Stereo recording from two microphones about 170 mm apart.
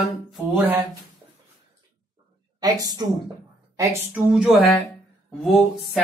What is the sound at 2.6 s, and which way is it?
Speech, 25° right (ahead or behind).